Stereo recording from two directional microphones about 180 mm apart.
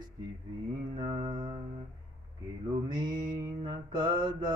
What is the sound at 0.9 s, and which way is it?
Mantra, 20° right (ahead or behind).